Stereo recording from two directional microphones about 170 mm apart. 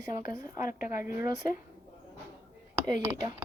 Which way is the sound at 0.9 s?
15° right (ahead or behind).